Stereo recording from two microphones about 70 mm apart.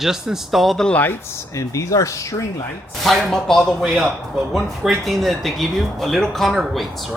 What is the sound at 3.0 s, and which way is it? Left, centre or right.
Speech, centre.